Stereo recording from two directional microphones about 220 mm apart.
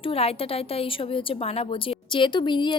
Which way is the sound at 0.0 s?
25° left (ahead or behind).